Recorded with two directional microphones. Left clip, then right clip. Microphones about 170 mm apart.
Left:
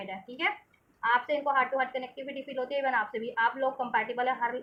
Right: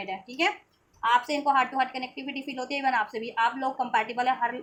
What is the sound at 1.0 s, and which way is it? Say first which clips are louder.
A woman's voice: right 3 dB; 35° right (ahead or behind).